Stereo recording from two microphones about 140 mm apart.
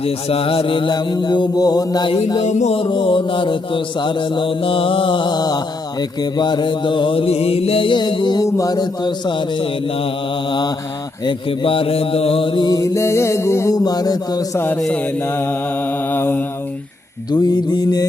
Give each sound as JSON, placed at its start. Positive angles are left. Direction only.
{"t": 0.0, "sound": "mantra", "side_deg": 45}
{"t": 2.4, "sound": "music", "side_deg": 55}
{"t": 2.7, "sound": "mantra", "side_deg": 40}
{"t": 11.3, "sound": "mantra", "side_deg": 40}
{"t": 14.8, "sound": "mantra", "side_deg": 10}
{"t": 17.4, "sound": "mantra", "side_deg": 30}